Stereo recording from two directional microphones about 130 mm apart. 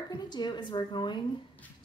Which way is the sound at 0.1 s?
35° left (ahead or behind).